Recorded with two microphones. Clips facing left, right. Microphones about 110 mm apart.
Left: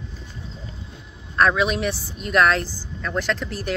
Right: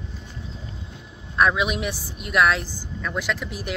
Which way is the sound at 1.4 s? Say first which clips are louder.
Left 2 dB; 15° right (ahead or behind).